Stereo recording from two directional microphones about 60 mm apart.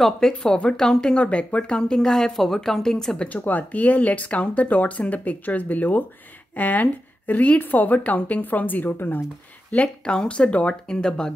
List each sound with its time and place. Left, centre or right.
0.3 s speech: centre
3.3 s speech: left
9.7 s speech: centre